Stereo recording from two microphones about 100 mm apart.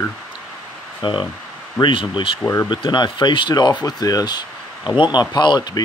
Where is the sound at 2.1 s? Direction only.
65° left (ahead or behind).